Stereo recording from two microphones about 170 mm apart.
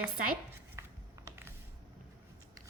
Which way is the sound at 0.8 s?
15° right (ahead or behind).